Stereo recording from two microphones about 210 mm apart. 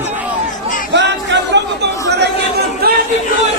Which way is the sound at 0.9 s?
55° right (ahead or behind).